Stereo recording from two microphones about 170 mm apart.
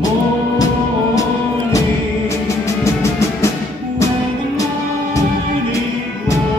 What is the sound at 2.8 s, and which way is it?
Music, 15° left (ahead or behind).